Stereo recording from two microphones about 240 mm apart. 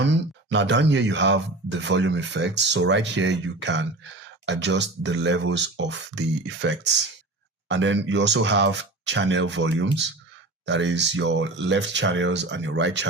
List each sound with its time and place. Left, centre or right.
0.0 s speech: right